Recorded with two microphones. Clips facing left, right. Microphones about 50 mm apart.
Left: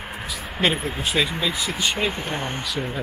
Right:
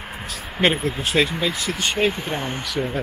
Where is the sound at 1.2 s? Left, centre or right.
Centre.